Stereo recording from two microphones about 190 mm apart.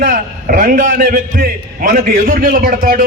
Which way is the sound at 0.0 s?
45° right (ahead or behind).